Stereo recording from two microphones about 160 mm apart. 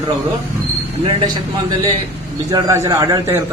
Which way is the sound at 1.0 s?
25° right (ahead or behind).